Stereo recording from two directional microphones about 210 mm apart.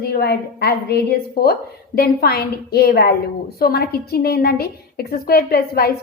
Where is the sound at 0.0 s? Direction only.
50° left (ahead or behind).